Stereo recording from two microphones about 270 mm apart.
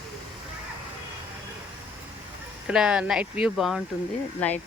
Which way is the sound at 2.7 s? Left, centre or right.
Centre.